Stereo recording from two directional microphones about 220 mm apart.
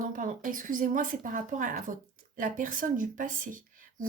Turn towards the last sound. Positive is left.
turn(degrees=-35)  # may be behind; listen again after turning